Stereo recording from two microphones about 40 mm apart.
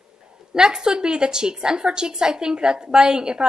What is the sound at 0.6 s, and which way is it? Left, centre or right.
A woman's voice, centre.